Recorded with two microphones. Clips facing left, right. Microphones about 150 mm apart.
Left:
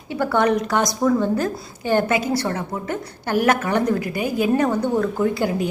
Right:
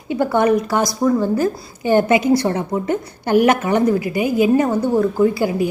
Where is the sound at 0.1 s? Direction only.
15° right (ahead or behind).